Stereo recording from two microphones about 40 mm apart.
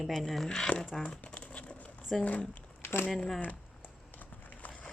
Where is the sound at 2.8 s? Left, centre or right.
Left.